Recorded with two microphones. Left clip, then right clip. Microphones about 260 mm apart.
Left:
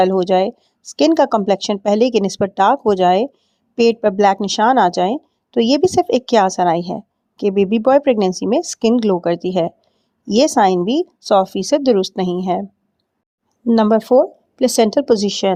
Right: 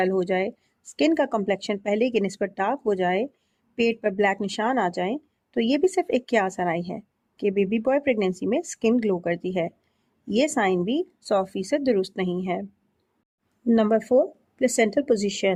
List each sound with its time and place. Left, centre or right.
0.0 s a woman's voice: left
13.7 s a woman's voice: left